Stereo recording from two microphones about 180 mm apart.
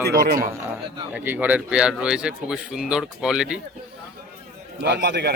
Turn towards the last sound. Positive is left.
turn(degrees=-65)  # may be behind; listen again after turning